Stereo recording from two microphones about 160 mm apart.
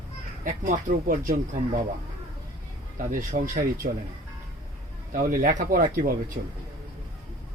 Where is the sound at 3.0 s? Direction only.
55° right (ahead or behind).